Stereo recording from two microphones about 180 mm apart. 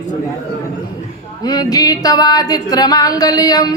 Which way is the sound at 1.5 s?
20° left (ahead or behind).